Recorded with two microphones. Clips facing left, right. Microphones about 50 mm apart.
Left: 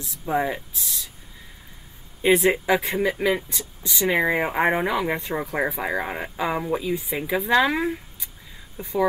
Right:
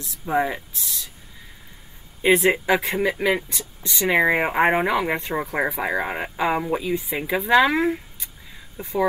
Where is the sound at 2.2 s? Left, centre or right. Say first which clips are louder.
Right 1 dB; centre.